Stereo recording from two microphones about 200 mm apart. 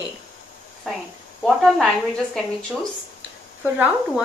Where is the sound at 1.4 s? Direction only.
Centre (ahead or behind).